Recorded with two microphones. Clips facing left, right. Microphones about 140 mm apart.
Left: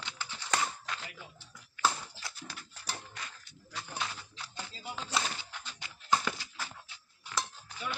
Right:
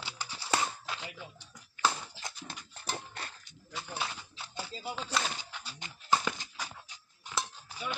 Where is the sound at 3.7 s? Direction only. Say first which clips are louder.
Right 1 dB; 5° right (ahead or behind).